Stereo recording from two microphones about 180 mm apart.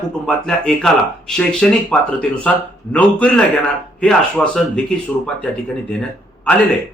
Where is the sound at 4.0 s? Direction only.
5° left (ahead or behind).